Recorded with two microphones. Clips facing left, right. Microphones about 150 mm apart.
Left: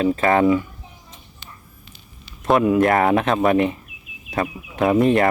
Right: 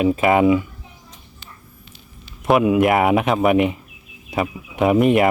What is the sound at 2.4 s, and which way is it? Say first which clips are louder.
Speech: right 1 dB; 15° right (ahead or behind).